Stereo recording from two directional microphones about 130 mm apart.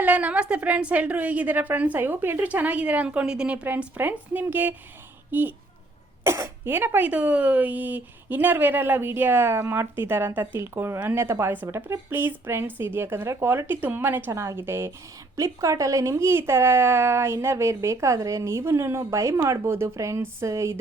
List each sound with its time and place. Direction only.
0.0 s a woman's voice: 10° right (ahead or behind)